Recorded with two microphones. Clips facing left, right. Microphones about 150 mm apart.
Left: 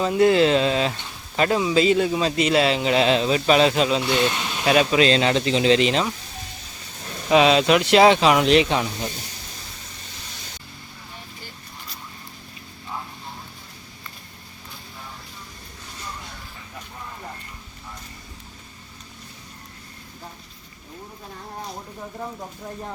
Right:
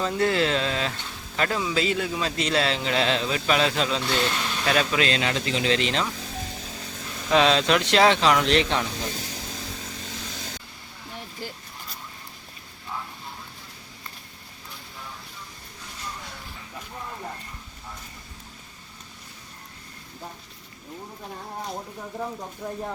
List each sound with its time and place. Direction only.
0.0 s a man's voice: 15° left (ahead or behind)
7.3 s speech: 10° left (ahead or behind)